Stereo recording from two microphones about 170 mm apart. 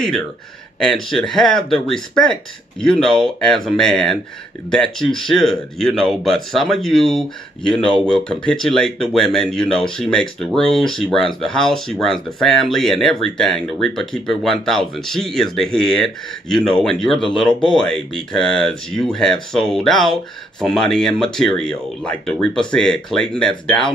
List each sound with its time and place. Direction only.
0.7 s speech: 5° left (ahead or behind)